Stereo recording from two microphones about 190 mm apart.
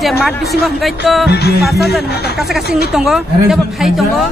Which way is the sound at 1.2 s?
60° left (ahead or behind).